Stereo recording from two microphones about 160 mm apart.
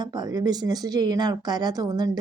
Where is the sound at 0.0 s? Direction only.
25° right (ahead or behind).